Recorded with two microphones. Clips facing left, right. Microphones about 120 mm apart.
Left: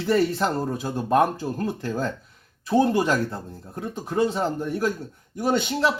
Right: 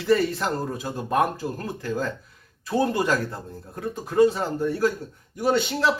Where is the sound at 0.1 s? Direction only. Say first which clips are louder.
Even; 25° left (ahead or behind).